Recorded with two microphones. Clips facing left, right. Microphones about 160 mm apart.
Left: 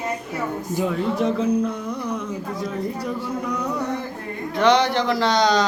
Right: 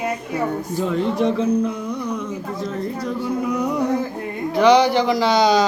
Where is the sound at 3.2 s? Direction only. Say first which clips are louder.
Right 5 dB; 10° right (ahead or behind).